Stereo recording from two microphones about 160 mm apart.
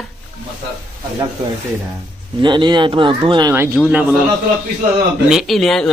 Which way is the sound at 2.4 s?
30° right (ahead or behind).